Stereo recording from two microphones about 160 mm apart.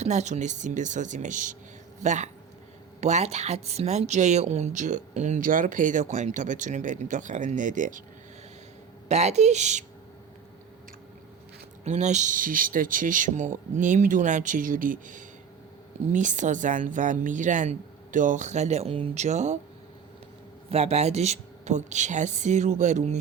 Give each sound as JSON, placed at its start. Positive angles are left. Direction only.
{"t": 0.0, "sound": "speech", "side_deg": -45}
{"t": 9.0, "sound": "speech", "side_deg": -45}
{"t": 11.9, "sound": "speech", "side_deg": -45}
{"t": 20.7, "sound": "speech", "side_deg": -45}